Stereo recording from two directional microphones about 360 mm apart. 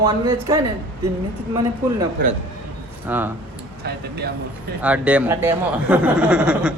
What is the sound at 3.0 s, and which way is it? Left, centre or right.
Speech, centre.